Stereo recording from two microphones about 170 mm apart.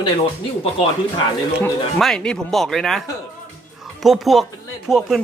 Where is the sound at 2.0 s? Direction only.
5° left (ahead or behind).